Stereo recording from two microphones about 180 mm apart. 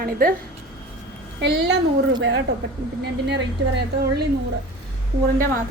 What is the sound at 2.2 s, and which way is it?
A woman's voice, 65° right (ahead or behind).